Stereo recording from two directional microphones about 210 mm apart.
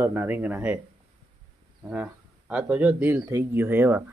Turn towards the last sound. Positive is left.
turn(degrees=-10)  # may be behind; listen again after turning